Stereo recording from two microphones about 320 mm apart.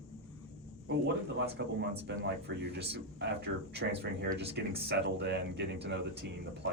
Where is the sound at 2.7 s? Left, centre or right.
Right.